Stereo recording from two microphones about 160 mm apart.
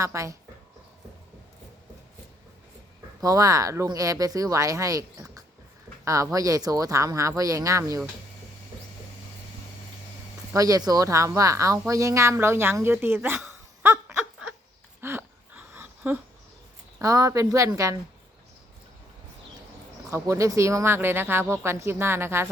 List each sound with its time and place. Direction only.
0.0 s speech: 20° right (ahead or behind)
3.2 s speech: 20° right (ahead or behind)
10.5 s speech: 20° right (ahead or behind)
15.0 s a sound: 15° right (ahead or behind)
17.0 s speech: 20° right (ahead or behind)
20.1 s speech: 15° right (ahead or behind)